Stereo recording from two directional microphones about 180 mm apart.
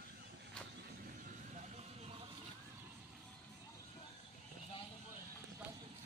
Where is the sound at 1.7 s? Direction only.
30° right (ahead or behind).